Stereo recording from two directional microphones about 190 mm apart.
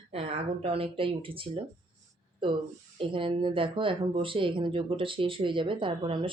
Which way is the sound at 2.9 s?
25° right (ahead or behind).